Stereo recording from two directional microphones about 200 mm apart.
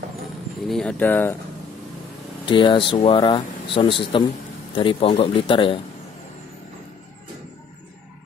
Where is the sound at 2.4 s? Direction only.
25° left (ahead or behind).